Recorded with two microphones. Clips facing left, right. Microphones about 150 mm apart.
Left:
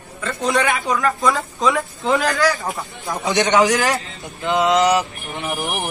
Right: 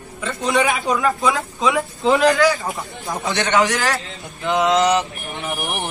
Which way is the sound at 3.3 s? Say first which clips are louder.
Left 3 dB; 15° left (ahead or behind).